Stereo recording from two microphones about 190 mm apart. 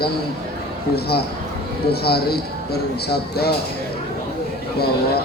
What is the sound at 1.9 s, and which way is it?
Speech, 55° left (ahead or behind).